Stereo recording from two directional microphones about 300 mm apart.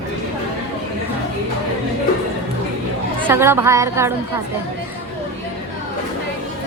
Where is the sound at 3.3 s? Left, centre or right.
Centre.